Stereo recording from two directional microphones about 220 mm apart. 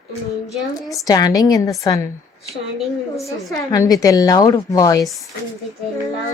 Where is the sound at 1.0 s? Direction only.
15° left (ahead or behind).